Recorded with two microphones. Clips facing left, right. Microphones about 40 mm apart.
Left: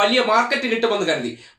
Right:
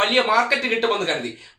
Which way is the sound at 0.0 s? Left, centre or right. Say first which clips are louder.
Left 1 dB; centre.